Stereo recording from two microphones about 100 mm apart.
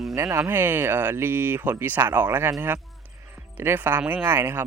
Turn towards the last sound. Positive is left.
turn(degrees=-20)  # may be behind; listen again after turning